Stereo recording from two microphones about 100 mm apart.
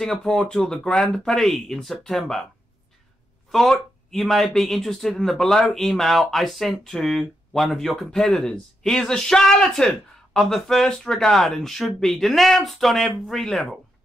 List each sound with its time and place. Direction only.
0.0 s speech: 5° left (ahead or behind)
3.5 s speech: 5° left (ahead or behind)